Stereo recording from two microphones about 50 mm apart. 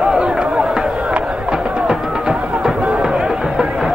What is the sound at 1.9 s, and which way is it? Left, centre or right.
Music, centre.